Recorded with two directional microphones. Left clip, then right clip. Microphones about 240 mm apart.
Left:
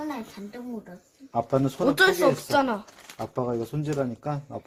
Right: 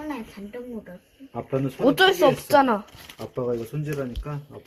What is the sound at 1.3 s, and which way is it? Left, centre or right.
Speech, left.